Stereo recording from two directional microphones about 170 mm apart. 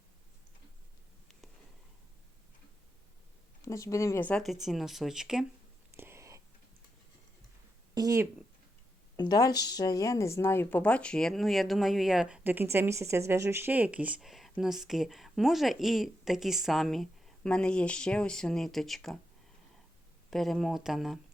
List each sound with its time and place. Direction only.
3.6 s a woman's voice: 20° left (ahead or behind); by 5.5 s 5° right (ahead or behind)
6.0 s a sound: 15° right (ahead or behind)
7.9 s speech: 20° right (ahead or behind)
9.1 s a woman's voice: 25° left (ahead or behind); by 19.2 s centre (ahead or behind)
20.3 s a woman's voice: centre (ahead or behind)